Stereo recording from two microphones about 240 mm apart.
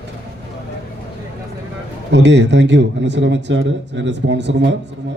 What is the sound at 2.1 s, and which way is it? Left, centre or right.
A man's voice, right.